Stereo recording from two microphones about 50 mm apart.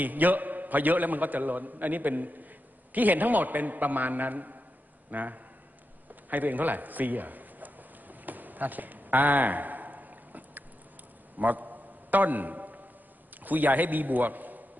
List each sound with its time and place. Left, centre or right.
0.0 s a man's voice: right
6.3 s a sound: right
13.4 s a man's voice: right